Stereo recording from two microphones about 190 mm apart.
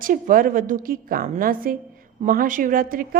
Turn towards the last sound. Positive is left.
turn(degrees=-50)  # may be behind; listen again after turning